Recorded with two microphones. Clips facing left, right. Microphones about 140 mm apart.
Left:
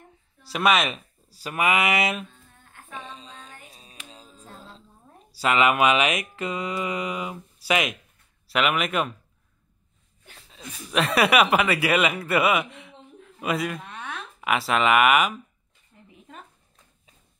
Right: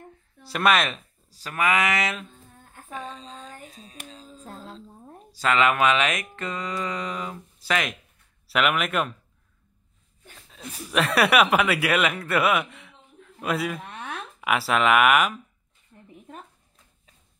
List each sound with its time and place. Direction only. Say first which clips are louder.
0.5 s speech: even; centre (ahead or behind)
2.7 s female singing: right 3 dB; 40° right (ahead or behind)
3.3 s music: right 4 dB; 40° right (ahead or behind)
3.7 s a sound: right 4 dB; 20° left (ahead or behind)
5.3 s speech: left 1 dB; 10° left (ahead or behind)
10.5 s speech: even; centre (ahead or behind)